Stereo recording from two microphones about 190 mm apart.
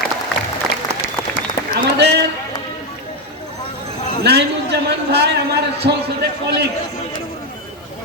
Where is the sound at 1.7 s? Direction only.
60° right (ahead or behind).